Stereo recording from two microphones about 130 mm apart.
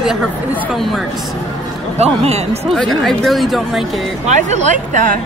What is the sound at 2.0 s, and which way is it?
Speech, 55° right (ahead or behind).